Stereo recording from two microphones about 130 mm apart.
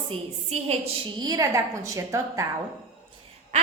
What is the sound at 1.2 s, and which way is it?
A woman's voice, 30° right (ahead or behind).